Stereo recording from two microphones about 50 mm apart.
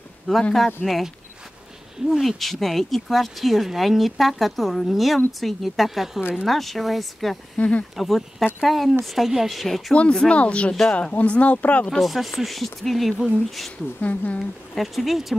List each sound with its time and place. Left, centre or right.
0.4 s speech: centre
0.8 s speech: centre
7.5 s speech: left
7.9 s speech: centre
9.9 s speech: centre
12.0 s speech: centre
14.0 s speech: left
14.8 s speech: centre